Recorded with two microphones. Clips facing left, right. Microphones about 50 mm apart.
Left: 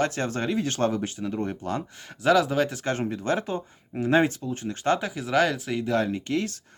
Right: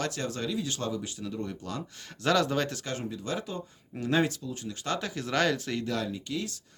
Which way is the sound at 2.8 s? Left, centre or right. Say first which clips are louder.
Left 8 dB; left.